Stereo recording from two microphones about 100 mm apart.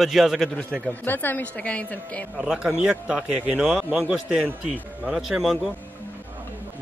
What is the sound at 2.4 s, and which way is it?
A man's voice, 5° right (ahead or behind).